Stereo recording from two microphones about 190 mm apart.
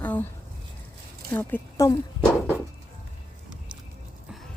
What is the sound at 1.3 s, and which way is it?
Speech, 15° left (ahead or behind).